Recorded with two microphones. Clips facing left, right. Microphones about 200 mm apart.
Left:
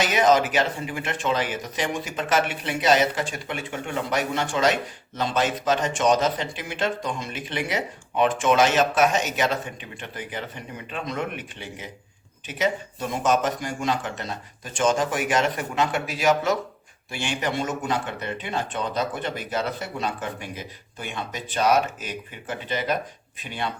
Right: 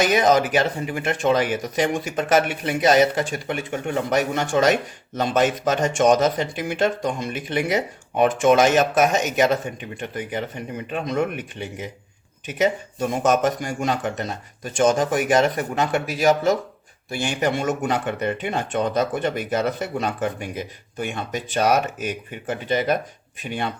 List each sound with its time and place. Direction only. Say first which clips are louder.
0.1 s speech: right 2 dB; 40° right (ahead or behind)
13.0 s speech: right 4 dB; 45° right (ahead or behind)